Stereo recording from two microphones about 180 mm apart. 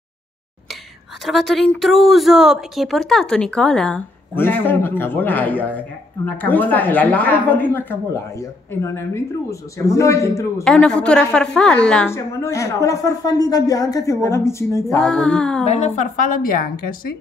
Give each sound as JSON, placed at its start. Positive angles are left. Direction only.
{"t": 1.2, "sound": "a woman's voice", "side_deg": 0}
{"t": 10.6, "sound": "a woman's voice", "side_deg": 5}
{"t": 15.0, "sound": "a sound", "side_deg": 5}
{"t": 15.6, "sound": "a woman's voice", "side_deg": 40}